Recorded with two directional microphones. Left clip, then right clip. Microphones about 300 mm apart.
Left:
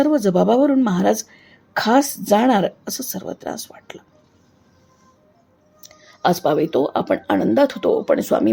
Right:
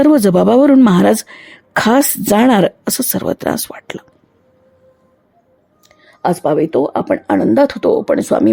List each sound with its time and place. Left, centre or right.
0.0 s speech: right
5.8 s speech: centre